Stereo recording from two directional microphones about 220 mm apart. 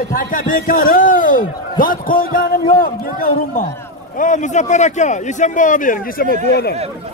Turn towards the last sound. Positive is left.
turn(degrees=35)  # may be behind; listen again after turning